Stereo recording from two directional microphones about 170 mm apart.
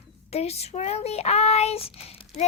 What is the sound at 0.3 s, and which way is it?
A child's voice, 40° left (ahead or behind).